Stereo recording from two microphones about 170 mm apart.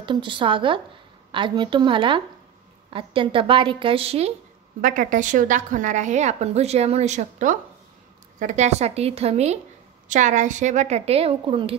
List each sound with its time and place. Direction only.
0.0 s a woman's voice: 30° right (ahead or behind)
4.8 s a woman's voice: 50° right (ahead or behind); by 11.7 s 35° right (ahead or behind)